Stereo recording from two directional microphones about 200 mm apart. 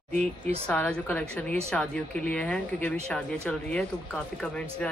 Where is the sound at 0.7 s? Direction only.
5° left (ahead or behind).